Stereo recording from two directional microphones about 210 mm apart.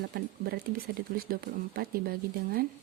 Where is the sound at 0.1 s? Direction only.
45° right (ahead or behind).